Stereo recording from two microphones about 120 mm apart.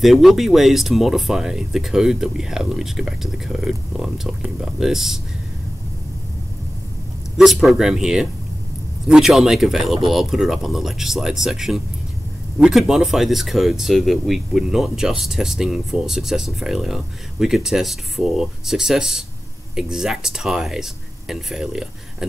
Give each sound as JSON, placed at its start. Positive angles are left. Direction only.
{"t": 0.0, "sound": "speech", "side_deg": 0}
{"t": 7.3, "sound": "speech", "side_deg": 0}